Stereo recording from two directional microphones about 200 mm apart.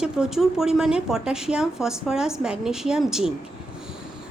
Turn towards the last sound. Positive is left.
turn(degrees=-5)  # may be behind; listen again after turning